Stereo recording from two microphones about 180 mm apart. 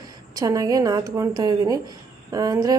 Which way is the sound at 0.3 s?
20° right (ahead or behind).